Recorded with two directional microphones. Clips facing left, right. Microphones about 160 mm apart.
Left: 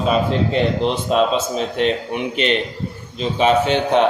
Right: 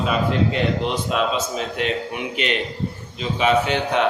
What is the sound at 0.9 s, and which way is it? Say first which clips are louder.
A man's voice: left 5 dB; 30° left (ahead or behind).